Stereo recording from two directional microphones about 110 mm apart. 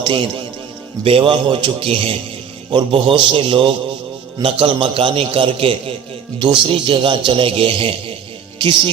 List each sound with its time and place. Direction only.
0.0 s a man's voice: 50° right (ahead or behind)